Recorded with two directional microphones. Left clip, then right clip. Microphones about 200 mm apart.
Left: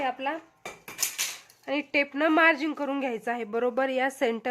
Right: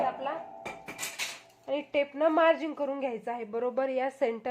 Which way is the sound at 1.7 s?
20° left (ahead or behind).